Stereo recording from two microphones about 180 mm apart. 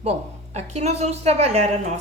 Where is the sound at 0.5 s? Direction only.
40° right (ahead or behind).